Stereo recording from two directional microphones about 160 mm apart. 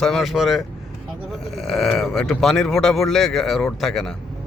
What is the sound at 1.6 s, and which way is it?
Speech, centre (ahead or behind).